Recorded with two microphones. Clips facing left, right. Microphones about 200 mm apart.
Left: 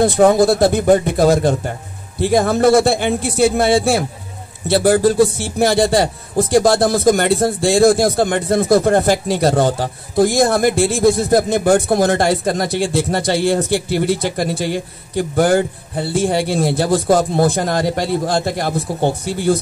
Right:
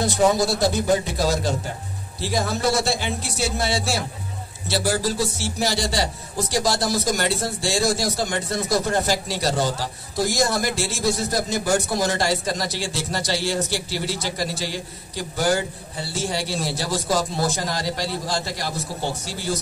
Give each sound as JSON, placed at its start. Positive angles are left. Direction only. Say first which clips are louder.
{"t": 0.0, "sound": "a man's voice", "louder": "left 8 dB", "side_deg": 55}